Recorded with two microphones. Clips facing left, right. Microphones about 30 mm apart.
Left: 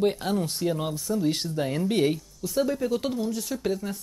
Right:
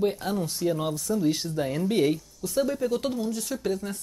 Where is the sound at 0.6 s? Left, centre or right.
Centre.